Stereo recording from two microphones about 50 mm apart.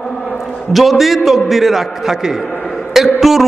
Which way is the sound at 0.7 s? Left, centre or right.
Centre.